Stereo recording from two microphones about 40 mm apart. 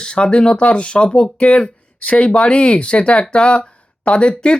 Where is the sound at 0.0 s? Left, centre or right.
Left.